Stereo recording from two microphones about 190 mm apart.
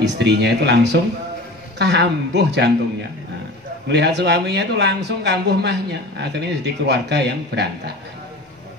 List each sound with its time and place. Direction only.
0.0 s speech: 65° right (ahead or behind)
3.9 s speech: 65° right (ahead or behind)